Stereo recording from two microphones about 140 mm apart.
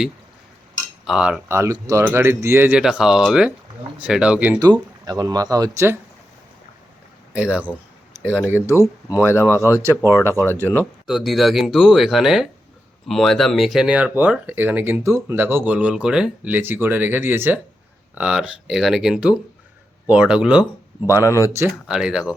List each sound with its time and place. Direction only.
1.0 s speech: 5° right (ahead or behind)
1.5 s speech: 20° right (ahead or behind)
4.6 s speech: 25° right (ahead or behind)
7.3 s speech: 10° right (ahead or behind)
9.3 s speech: 20° left (ahead or behind)
9.6 s speech: 15° right (ahead or behind)
10.4 s speech: 15° left (ahead or behind)
11.0 s speech: centre (ahead or behind)
21.2 s speech: 20° left (ahead or behind)
21.4 s speech: 20° right (ahead or behind)
21.7 s speech: 5° right (ahead or behind)